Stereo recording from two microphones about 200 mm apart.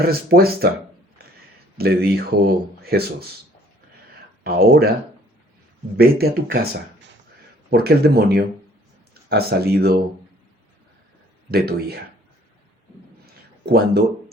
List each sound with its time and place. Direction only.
0.0 s speech: 50° right (ahead or behind)
1.2 s a sound: 50° right (ahead or behind)
1.8 s speech: 50° right (ahead or behind)
4.4 s speech: 50° right (ahead or behind)
6.0 s speech: 50° right (ahead or behind)
7.7 s speech: 50° right (ahead or behind)
11.5 s speech: 50° right (ahead or behind)
13.7 s speech: 50° right (ahead or behind)